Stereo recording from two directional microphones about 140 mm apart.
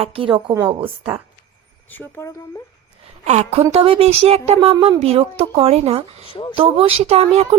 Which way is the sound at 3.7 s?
45° right (ahead or behind).